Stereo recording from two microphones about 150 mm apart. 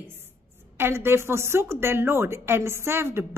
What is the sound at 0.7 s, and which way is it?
A woman's voice, 15° right (ahead or behind).